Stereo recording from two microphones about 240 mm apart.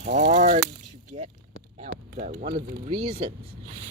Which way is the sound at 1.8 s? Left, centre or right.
Right.